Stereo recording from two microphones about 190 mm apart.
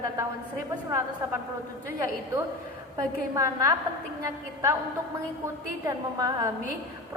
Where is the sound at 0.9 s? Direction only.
15° right (ahead or behind).